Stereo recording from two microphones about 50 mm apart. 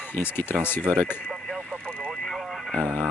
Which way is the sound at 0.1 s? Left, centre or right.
Left.